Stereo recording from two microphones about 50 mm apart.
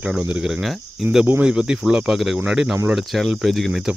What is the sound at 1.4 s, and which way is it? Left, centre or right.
Speech, centre.